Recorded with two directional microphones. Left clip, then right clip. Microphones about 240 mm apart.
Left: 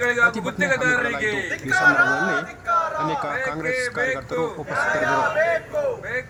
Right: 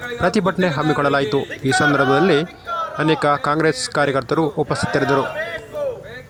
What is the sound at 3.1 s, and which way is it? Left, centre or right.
Speech, right.